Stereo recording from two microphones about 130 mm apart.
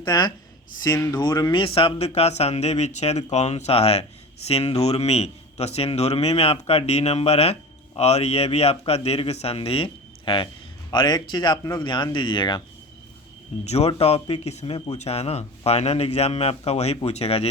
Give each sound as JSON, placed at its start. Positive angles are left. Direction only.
{"t": 0.0, "sound": "a man's voice", "side_deg": 35}
{"t": 13.7, "sound": "a man's voice", "side_deg": 55}